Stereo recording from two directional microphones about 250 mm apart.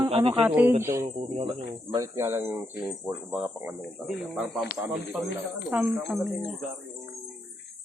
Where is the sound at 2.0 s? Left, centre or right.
Centre.